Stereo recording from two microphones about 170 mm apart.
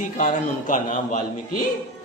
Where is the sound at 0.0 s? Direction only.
50° left (ahead or behind).